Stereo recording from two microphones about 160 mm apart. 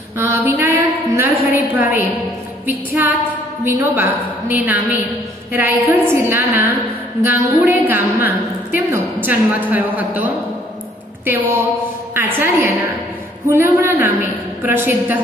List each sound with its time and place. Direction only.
0.2 s a woman's voice: 15° right (ahead or behind)